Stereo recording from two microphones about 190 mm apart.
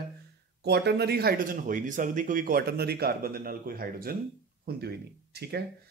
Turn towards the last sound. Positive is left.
turn(degrees=-60)  # may be behind; listen again after turning